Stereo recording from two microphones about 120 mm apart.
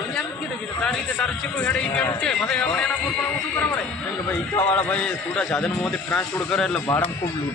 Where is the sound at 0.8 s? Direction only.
5° left (ahead or behind).